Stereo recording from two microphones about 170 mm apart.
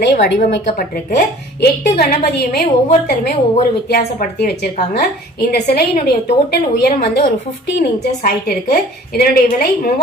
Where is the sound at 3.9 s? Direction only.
70° left (ahead or behind).